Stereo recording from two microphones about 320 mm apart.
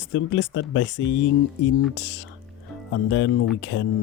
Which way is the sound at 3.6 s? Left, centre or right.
Left.